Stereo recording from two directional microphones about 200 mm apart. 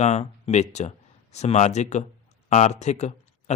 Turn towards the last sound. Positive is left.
turn(degrees=35)  # may be behind; listen again after turning